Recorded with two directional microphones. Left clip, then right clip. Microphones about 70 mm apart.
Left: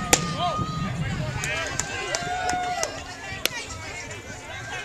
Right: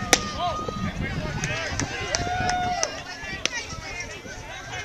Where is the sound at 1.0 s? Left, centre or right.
Right.